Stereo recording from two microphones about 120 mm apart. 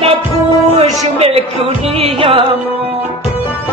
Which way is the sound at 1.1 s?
55° right (ahead or behind).